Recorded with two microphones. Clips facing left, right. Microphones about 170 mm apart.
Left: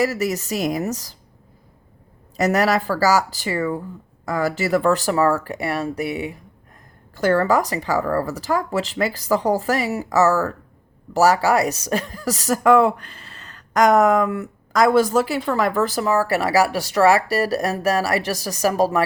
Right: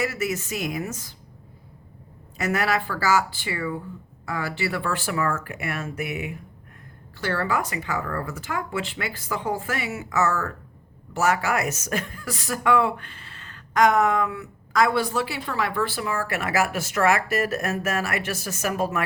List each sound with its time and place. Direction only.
0.0 s speech: 40° left (ahead or behind)
2.3 s speech: 40° left (ahead or behind)
7.2 s speech: 45° left (ahead or behind)